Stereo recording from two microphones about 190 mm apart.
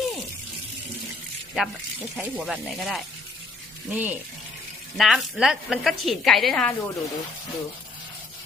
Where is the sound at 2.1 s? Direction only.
5° right (ahead or behind).